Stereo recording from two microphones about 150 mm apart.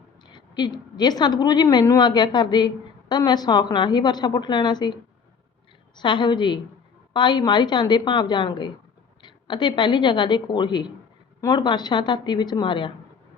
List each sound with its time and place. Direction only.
0.3 s a woman's voice: 30° left (ahead or behind)
6.0 s a woman's voice: 30° left (ahead or behind)